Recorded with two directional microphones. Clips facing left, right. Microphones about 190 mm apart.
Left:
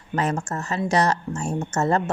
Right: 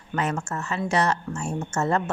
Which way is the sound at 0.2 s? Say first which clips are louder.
Left 2 dB; 40° left (ahead or behind).